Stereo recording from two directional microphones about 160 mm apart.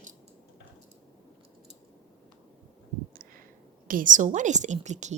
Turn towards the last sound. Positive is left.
turn(degrees=-45)  # may be behind; listen again after turning